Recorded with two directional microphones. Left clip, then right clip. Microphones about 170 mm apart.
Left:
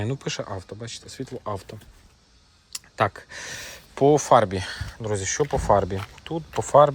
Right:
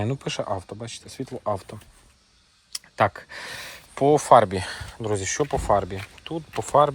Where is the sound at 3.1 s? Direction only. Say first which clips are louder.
Even; 5° left (ahead or behind).